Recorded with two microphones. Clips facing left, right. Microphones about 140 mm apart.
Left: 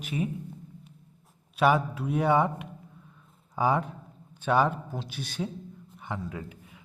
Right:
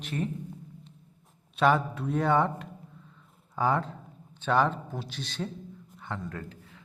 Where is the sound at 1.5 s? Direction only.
10° left (ahead or behind).